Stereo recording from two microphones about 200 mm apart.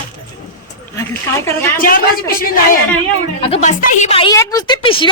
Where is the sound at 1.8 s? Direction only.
45° left (ahead or behind).